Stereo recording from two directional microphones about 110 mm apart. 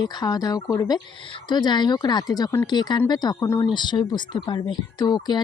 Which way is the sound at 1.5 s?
40° left (ahead or behind).